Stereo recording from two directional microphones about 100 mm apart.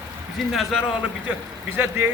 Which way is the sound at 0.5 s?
Centre (ahead or behind).